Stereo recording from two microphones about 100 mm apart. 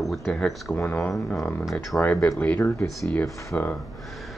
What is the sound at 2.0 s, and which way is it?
Speech, 15° left (ahead or behind).